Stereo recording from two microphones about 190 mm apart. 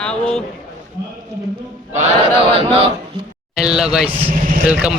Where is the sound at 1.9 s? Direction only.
35° right (ahead or behind).